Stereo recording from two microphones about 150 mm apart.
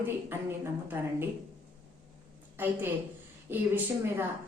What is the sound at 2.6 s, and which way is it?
A woman's voice, 15° right (ahead or behind).